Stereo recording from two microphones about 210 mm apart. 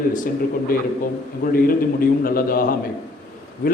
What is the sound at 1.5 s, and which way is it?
A man's voice, 45° left (ahead or behind).